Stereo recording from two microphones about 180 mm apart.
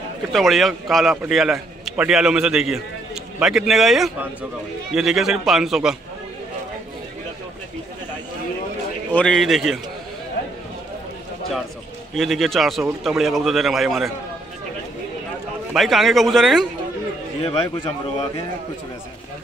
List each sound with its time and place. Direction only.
0.3 s a man's voice: centre (ahead or behind)
9.1 s a man's voice: 5° left (ahead or behind)
12.2 s a man's voice: centre (ahead or behind)
15.7 s a man's voice: centre (ahead or behind)
17.4 s a man's voice: 30° left (ahead or behind)